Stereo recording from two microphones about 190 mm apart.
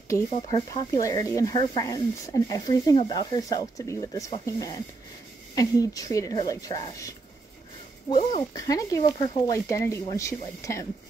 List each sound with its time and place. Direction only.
0.1 s speech: 20° left (ahead or behind)
8.5 s speech: 20° left (ahead or behind)